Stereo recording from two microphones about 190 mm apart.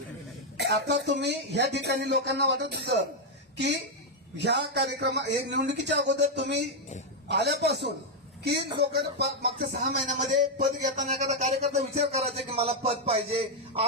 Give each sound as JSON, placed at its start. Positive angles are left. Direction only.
{"t": 0.5, "sound": "speech", "side_deg": -60}
{"t": 4.4, "sound": "speech", "side_deg": -60}
{"t": 9.8, "sound": "speech", "side_deg": -40}